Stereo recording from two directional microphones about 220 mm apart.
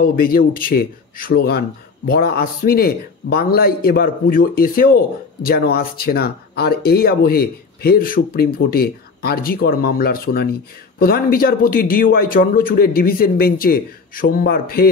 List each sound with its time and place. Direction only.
0.0 s speech: 40° left (ahead or behind)